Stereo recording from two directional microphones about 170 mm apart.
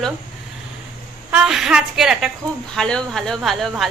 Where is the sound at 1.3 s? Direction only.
5° right (ahead or behind).